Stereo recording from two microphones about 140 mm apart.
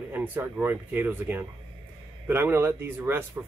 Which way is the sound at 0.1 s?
15° right (ahead or behind).